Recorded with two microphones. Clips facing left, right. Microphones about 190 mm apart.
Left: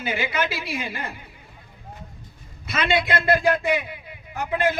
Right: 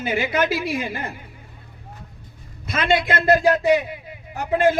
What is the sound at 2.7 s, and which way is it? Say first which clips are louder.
A man's voice: right 2 dB; 45° right (ahead or behind).